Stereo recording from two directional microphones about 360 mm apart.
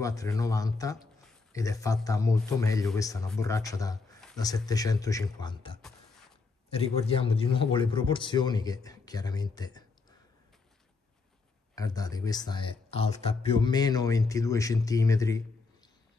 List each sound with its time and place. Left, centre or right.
0.0 s a man's voice: centre
5.8 s a sound: centre
6.7 s a man's voice: centre
11.7 s a man's voice: centre